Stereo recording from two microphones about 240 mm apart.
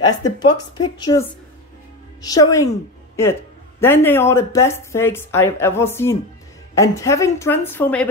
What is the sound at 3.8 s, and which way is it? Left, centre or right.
A woman's voice, centre.